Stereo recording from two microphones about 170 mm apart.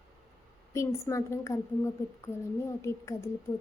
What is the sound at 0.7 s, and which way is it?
A woman's voice, 15° left (ahead or behind).